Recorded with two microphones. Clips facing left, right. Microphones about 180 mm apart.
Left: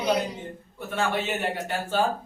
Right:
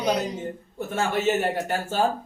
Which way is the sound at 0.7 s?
45° right (ahead or behind).